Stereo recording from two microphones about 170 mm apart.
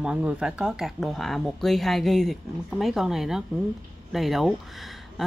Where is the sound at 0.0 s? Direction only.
5° right (ahead or behind).